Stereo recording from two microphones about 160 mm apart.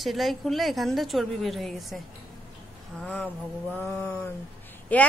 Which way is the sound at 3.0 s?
5° left (ahead or behind).